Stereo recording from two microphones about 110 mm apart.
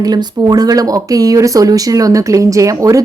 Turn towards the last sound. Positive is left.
turn(degrees=-30)  # may be behind; listen again after turning